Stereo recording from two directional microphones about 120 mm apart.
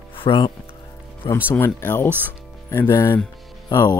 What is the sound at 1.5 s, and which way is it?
Speech, 20° left (ahead or behind).